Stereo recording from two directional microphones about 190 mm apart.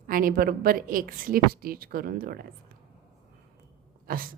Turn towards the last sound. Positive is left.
turn(degrees=-50)  # may be behind; listen again after turning